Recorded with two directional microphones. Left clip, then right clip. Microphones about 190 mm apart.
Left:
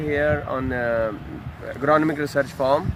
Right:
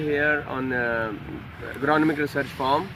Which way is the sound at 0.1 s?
35° left (ahead or behind).